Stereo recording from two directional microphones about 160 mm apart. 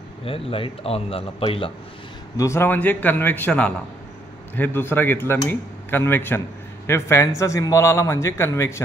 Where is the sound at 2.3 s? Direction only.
15° left (ahead or behind).